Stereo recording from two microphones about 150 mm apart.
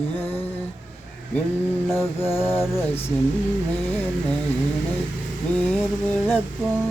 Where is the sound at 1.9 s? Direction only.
15° left (ahead or behind).